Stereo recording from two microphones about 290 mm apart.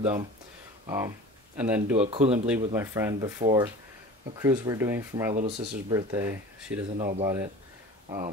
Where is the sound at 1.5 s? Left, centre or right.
Centre.